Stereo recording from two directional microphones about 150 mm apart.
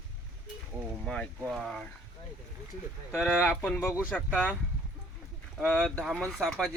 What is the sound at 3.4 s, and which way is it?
Speech, 15° left (ahead or behind).